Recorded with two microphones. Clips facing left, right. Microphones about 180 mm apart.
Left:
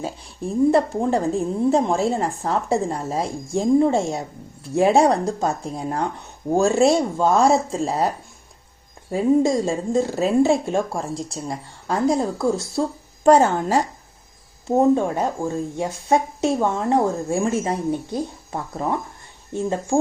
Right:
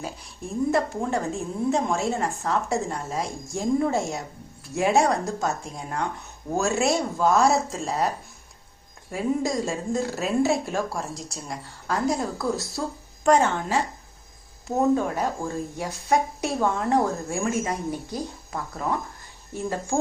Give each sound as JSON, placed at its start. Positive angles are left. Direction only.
{"t": 0.0, "sound": "a woman's voice", "side_deg": 30}
{"t": 13.2, "sound": "a woman's voice", "side_deg": 35}
{"t": 14.7, "sound": "speech", "side_deg": 25}